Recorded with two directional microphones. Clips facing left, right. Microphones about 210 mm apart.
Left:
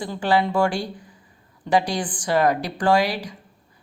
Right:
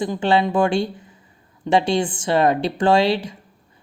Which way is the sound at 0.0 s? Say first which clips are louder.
Right 3 dB; 20° right (ahead or behind).